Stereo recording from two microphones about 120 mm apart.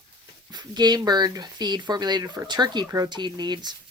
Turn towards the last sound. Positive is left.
turn(degrees=-35)  # may be behind; listen again after turning